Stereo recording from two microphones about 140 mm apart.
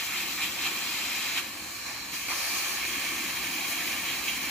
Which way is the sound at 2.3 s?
Centre (ahead or behind).